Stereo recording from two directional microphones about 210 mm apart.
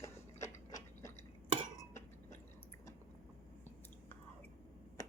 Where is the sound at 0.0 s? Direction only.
15° left (ahead or behind).